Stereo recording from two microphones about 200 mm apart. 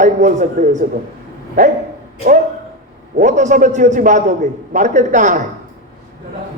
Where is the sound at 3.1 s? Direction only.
35° right (ahead or behind).